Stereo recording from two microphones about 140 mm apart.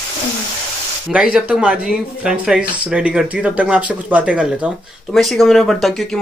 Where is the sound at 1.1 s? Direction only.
10° right (ahead or behind).